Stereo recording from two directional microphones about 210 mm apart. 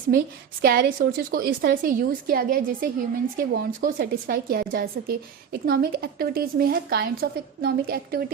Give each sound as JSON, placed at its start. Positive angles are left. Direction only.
{"t": 0.6, "sound": "a woman's voice", "side_deg": -45}